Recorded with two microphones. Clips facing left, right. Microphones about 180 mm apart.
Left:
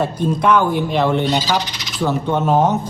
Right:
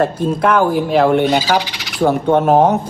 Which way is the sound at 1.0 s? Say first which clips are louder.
Right 4 dB; 55° right (ahead or behind).